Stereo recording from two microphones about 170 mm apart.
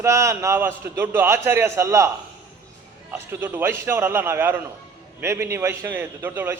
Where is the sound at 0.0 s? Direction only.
15° right (ahead or behind).